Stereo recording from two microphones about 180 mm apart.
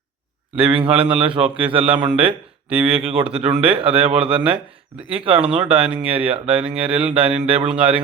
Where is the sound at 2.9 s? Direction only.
30° right (ahead or behind).